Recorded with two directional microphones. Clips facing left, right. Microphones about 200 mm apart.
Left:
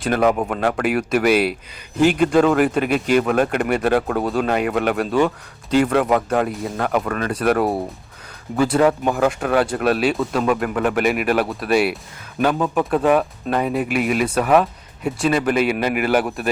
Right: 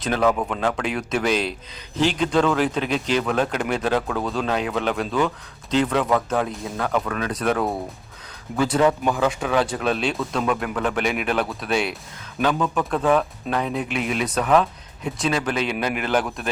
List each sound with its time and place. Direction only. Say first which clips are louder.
0.2 s a man's voice: left 2 dB; 15° left (ahead or behind)
6.4 s a man's voice: left 4 dB; 5° left (ahead or behind)